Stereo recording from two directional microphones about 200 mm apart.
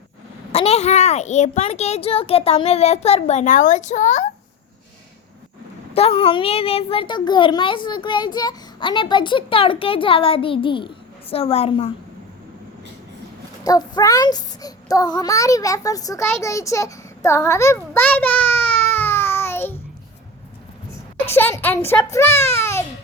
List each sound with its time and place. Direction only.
0.5 s a child's voice: 30° left (ahead or behind)
5.9 s a child's voice: 30° left (ahead or behind)
13.7 s a child's voice: 20° left (ahead or behind)
21.3 s a child's voice: 10° left (ahead or behind)
22.5 s babbling: 15° left (ahead or behind)